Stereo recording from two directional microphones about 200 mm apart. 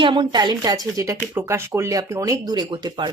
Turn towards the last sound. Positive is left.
turn(degrees=-20)  # may be behind; listen again after turning